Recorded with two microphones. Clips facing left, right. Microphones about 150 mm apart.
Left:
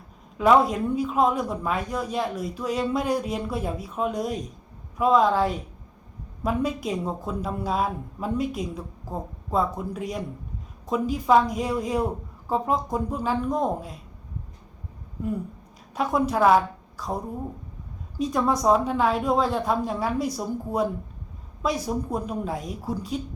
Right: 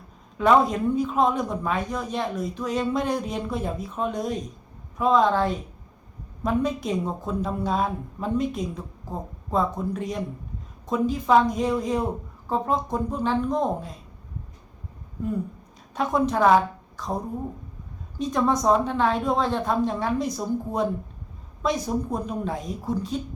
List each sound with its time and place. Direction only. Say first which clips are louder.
0.3 s a man's voice: even; 5° left (ahead or behind)
16.0 s a woman's voice: even; 10° left (ahead or behind)
18.2 s a man's voice: even; 5° left (ahead or behind)